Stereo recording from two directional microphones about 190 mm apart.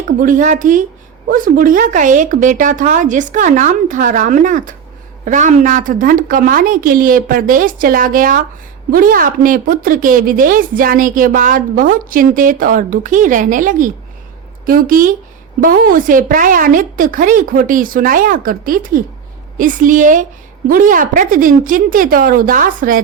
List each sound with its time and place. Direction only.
0.2 s a woman's voice: 45° right (ahead or behind)